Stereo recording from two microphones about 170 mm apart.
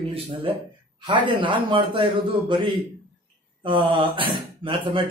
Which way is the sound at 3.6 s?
30° right (ahead or behind).